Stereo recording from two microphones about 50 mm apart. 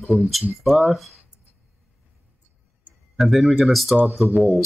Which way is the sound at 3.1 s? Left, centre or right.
Centre.